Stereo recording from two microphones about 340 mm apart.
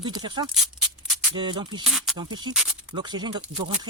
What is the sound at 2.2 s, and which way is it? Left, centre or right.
Speech, centre.